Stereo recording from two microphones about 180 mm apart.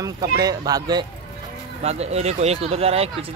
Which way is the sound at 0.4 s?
20° right (ahead or behind).